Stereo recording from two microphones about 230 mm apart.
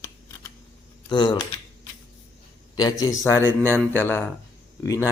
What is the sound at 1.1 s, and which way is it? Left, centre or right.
Speech, centre.